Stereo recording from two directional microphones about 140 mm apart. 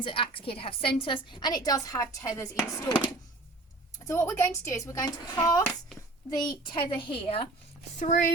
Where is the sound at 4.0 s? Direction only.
20° left (ahead or behind); by 7.4 s 40° left (ahead or behind).